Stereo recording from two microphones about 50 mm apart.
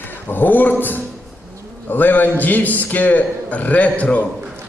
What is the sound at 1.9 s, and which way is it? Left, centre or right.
A man's voice, left.